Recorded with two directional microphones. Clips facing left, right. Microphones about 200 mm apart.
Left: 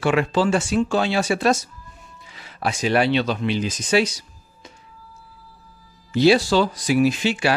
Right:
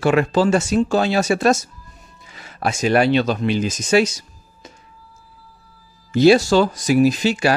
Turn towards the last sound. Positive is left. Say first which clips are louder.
# right 3 dB
turn(degrees=-40)  # may be behind; listen again after turning